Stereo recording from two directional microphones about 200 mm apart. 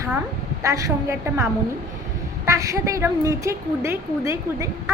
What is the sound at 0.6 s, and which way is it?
Speech, 15° right (ahead or behind).